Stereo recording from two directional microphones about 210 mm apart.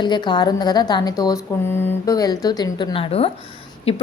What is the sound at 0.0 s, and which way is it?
A woman's voice, 20° left (ahead or behind).